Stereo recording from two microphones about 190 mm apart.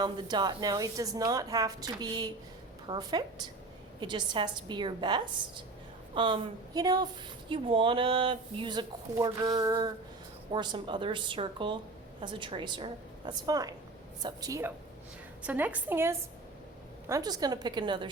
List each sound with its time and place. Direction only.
0.0 s a woman's voice: 20° right (ahead or behind)